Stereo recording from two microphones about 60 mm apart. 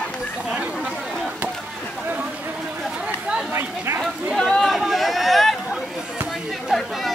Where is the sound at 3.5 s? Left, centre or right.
Right.